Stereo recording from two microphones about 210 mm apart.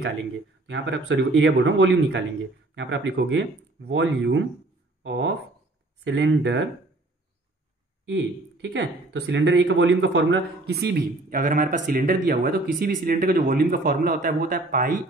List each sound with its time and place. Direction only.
0.0 s speech: 55° right (ahead or behind)
8.1 s speech: 55° right (ahead or behind); by 15.0 s 40° right (ahead or behind)